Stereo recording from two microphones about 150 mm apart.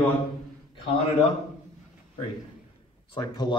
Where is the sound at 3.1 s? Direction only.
30° left (ahead or behind).